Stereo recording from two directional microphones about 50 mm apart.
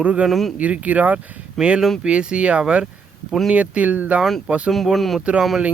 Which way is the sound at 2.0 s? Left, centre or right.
Right.